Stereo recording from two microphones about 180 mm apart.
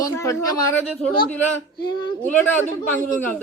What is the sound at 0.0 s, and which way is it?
A woman's voice, 15° left (ahead or behind).